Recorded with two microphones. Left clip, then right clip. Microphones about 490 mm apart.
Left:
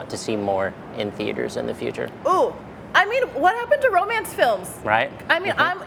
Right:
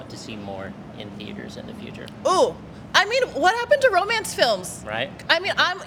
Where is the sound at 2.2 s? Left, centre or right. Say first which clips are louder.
Right 1 dB; right.